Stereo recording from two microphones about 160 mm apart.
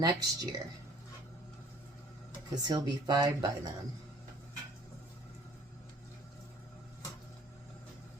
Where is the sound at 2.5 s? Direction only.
25° right (ahead or behind).